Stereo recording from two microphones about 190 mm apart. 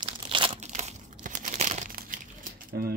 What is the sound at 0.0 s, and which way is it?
Crumpling, 25° right (ahead or behind).